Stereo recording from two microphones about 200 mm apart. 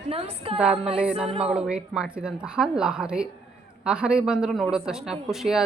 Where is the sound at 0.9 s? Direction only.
5° right (ahead or behind).